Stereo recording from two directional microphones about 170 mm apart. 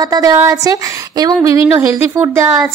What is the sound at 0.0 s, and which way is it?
Speech, 20° right (ahead or behind).